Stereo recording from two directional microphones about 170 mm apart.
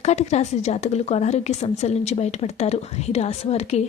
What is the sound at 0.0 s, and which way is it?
A woman's voice, 40° left (ahead or behind).